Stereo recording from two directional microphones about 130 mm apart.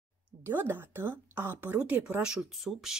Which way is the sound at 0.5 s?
15° right (ahead or behind).